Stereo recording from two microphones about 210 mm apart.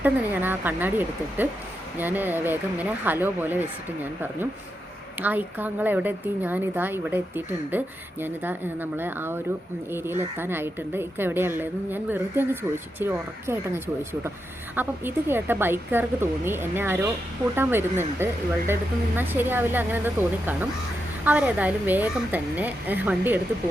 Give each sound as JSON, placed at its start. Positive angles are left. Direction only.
{"t": 0.0, "sound": "a woman's voice", "side_deg": -10}